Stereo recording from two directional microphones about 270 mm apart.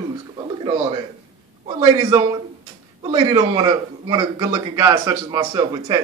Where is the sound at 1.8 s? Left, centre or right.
Centre.